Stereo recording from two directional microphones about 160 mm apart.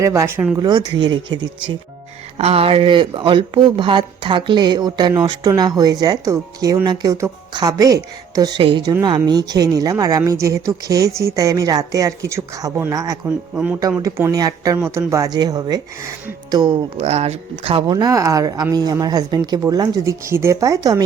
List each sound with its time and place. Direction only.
0.0 s speech: 15° right (ahead or behind)
0.6 s speech: 30° right (ahead or behind)
17.0 s speech: 40° right (ahead or behind); by 21.0 s 20° right (ahead or behind)